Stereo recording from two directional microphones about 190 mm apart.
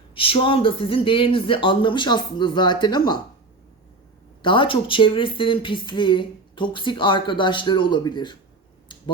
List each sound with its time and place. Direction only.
0.1 s a woman's voice: 30° left (ahead or behind)
4.4 s a woman's voice: 25° left (ahead or behind)